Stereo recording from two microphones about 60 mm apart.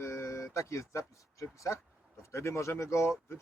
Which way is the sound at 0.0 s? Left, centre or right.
Left.